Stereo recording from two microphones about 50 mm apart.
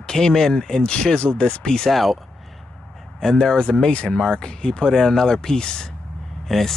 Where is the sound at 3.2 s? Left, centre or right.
Centre.